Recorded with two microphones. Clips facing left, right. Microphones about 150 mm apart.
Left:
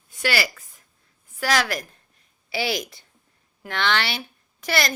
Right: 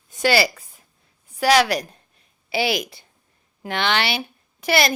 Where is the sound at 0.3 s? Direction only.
35° right (ahead or behind).